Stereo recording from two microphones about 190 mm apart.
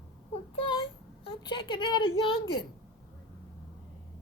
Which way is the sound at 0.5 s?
25° left (ahead or behind).